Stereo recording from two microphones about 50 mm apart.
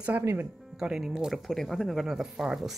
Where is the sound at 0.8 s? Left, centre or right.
Centre.